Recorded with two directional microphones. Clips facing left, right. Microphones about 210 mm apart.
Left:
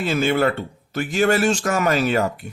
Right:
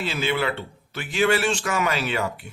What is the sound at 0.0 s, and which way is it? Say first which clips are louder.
Speech: left 6 dB; 45° left (ahead or behind).